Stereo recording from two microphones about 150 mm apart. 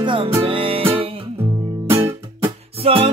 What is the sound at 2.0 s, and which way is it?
Music, 40° right (ahead or behind).